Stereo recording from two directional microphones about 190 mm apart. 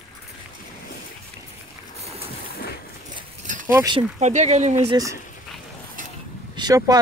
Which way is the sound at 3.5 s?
40° right (ahead or behind).